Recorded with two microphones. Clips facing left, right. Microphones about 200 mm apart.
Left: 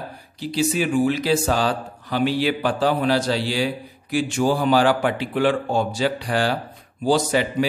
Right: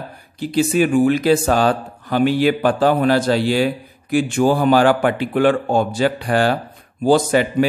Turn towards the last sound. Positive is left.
turn(degrees=-50)  # may be behind; listen again after turning